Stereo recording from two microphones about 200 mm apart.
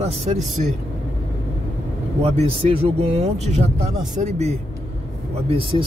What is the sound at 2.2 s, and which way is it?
Speech, 30° right (ahead or behind).